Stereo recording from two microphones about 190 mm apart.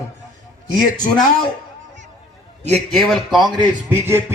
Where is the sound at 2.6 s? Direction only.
35° right (ahead or behind).